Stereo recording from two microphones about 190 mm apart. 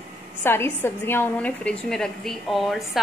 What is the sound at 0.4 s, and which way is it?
A woman's voice, 10° left (ahead or behind).